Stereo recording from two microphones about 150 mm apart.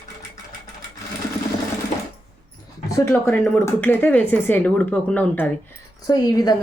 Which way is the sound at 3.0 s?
20° left (ahead or behind).